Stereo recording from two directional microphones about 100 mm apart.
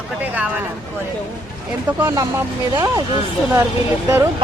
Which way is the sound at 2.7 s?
40° right (ahead or behind).